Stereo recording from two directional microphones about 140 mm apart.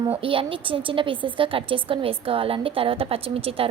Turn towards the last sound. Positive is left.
turn(degrees=-40)  # may be behind; listen again after turning